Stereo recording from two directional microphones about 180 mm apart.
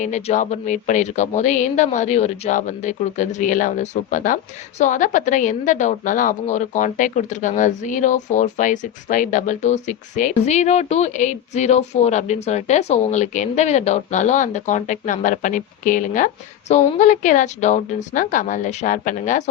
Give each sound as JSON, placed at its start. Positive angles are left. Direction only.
{"t": 0.0, "sound": "speech", "side_deg": 40}